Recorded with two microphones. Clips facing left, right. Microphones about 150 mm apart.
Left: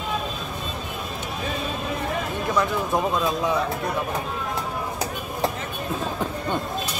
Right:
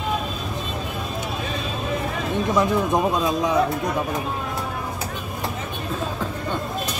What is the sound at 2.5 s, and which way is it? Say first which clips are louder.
Speech: right 3 dB; 20° right (ahead or behind).